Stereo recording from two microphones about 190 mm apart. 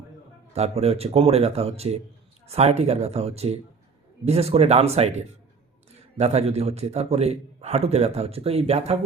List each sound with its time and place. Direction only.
0.5 s a man's voice: 35° right (ahead or behind)